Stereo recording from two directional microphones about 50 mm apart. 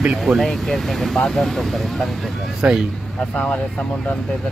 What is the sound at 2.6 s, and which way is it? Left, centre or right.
Speech, right.